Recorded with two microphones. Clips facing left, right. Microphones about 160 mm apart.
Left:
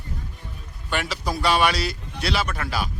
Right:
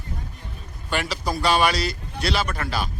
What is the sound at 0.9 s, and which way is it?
Speech, centre (ahead or behind).